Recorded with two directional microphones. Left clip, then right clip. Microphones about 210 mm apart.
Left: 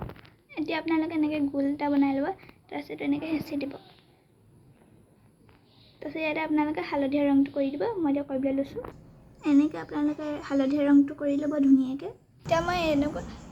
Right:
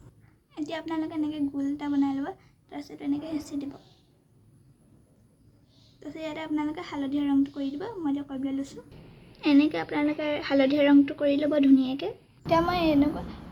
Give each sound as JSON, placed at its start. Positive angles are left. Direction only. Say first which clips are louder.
{"t": 0.5, "sound": "a woman's voice", "louder": "left 4 dB", "side_deg": -5}
{"t": 6.0, "sound": "a woman's voice", "louder": "left 6 dB", "side_deg": 0}
{"t": 12.5, "sound": "a child's voice", "louder": "right 2 dB", "side_deg": 15}